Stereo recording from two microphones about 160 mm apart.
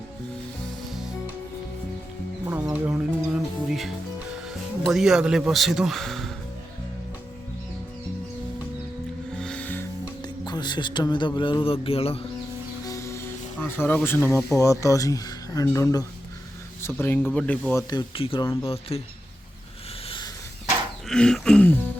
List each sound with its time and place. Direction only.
0.9 s music: centre (ahead or behind)
2.7 s music: 10° right (ahead or behind)
4.4 s speech: centre (ahead or behind)
9.4 s music: 5° left (ahead or behind)
10.2 s speech: 25° left (ahead or behind)
12.8 s speech: 20° left (ahead or behind)
17.8 s speech: 30° left (ahead or behind)
20.1 s a sound: 30° left (ahead or behind)
21.1 s speech: 5° left (ahead or behind)